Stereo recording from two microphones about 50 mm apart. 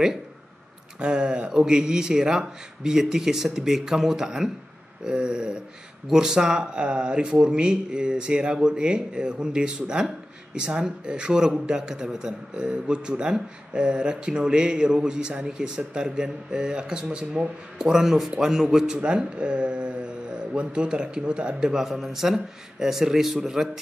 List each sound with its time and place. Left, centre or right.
0.9 s speech: centre
18.9 s speech: right